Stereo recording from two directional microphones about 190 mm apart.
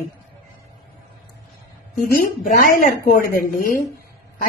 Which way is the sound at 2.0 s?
50° left (ahead or behind).